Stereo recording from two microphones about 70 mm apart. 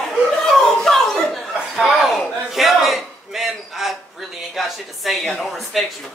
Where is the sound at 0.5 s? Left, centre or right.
Centre.